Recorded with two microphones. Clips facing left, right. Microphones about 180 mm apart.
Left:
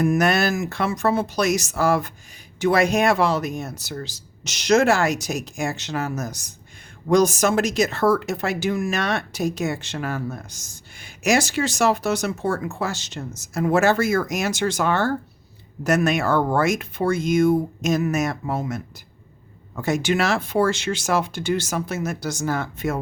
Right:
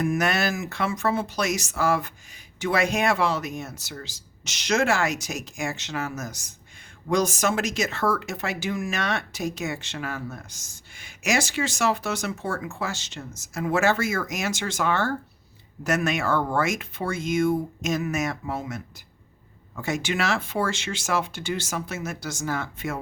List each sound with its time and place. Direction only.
0.0 s speech: 40° left (ahead or behind)